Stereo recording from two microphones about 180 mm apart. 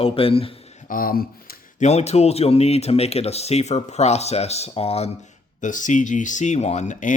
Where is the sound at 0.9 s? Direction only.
50° left (ahead or behind).